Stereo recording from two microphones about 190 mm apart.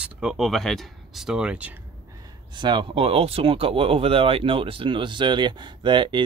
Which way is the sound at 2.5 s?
25° right (ahead or behind).